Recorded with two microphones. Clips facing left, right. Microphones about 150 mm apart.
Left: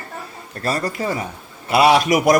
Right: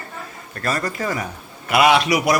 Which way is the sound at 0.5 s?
30° left (ahead or behind).